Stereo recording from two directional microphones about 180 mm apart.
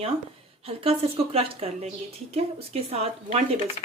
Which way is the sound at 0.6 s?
30° right (ahead or behind).